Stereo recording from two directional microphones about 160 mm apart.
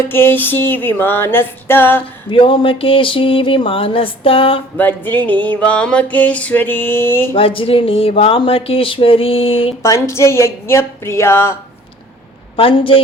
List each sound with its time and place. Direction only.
0.1 s music: 15° left (ahead or behind)
2.3 s speech: 30° left (ahead or behind)
4.8 s music: 10° left (ahead or behind)
7.3 s speech: 35° left (ahead or behind)
9.8 s music: 20° left (ahead or behind)
12.5 s speech: 35° left (ahead or behind)